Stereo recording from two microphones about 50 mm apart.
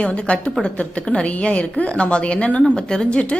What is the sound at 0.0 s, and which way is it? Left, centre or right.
A woman's voice, left.